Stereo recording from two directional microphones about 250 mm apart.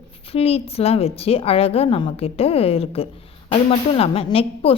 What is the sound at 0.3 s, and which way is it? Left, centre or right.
A woman's voice, left.